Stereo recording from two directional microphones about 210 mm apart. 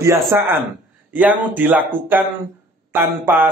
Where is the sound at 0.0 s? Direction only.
10° right (ahead or behind).